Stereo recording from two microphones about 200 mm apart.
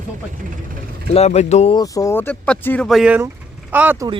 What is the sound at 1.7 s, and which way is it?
Speech, 15° left (ahead or behind).